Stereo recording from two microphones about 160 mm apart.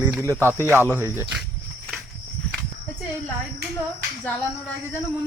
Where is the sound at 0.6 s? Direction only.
15° right (ahead or behind).